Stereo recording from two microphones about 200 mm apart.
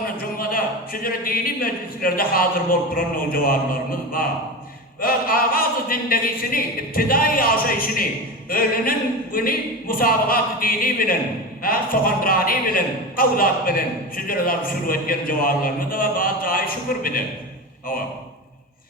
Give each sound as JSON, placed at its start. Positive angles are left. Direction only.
{"t": 1.0, "sound": "a man's voice", "side_deg": 45}